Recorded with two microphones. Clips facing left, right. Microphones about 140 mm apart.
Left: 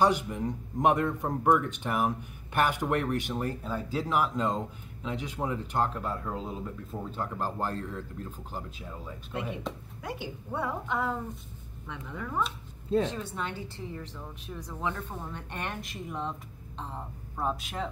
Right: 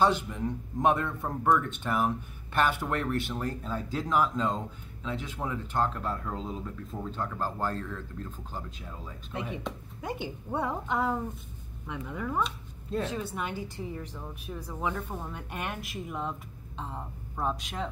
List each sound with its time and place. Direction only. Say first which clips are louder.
0.0 s speech: even; 15° left (ahead or behind)
10.0 s a woman's voice: right 2 dB; 20° right (ahead or behind); by 17.8 s centre (ahead or behind)